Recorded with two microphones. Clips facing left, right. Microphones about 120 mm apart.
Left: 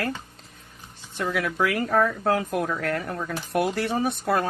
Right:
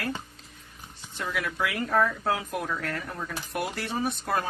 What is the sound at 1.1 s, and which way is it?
Speech, 50° left (ahead or behind).